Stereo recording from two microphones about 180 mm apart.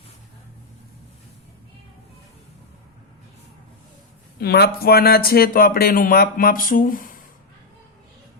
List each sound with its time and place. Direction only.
4.4 s speech: 60° left (ahead or behind)